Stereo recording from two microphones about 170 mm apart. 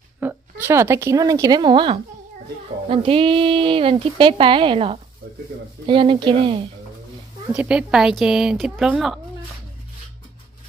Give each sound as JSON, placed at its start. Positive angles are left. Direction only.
{"t": 0.2, "sound": "a woman's voice", "side_deg": -15}
{"t": 7.5, "sound": "speech", "side_deg": -5}